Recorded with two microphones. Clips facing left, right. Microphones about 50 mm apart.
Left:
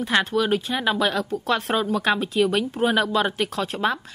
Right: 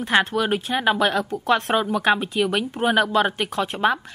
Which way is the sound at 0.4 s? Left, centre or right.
Centre.